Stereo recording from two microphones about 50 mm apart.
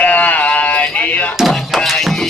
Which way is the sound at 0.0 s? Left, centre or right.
Left.